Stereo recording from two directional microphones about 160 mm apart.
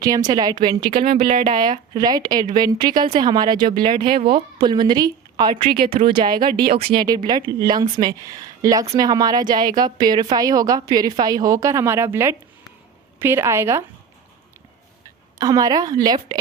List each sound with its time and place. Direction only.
0.0 s a woman's voice: 25° right (ahead or behind)
15.4 s a woman's voice: 20° right (ahead or behind)